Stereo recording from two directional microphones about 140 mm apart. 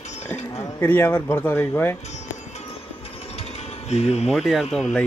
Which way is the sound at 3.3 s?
50° left (ahead or behind).